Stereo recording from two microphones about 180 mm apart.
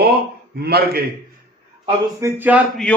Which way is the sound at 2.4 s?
10° right (ahead or behind).